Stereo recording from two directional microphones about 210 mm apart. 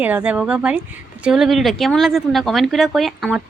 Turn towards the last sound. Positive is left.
turn(degrees=0)  # may be behind; listen again after turning